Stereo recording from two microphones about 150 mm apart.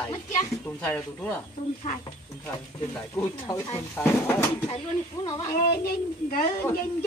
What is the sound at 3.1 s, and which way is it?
Speech, 20° left (ahead or behind).